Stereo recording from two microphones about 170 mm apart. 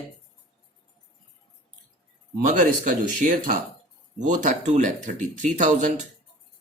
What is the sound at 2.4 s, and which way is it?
Speech, 50° right (ahead or behind).